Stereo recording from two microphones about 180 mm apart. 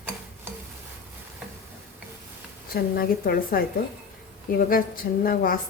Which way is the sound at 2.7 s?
55° left (ahead or behind).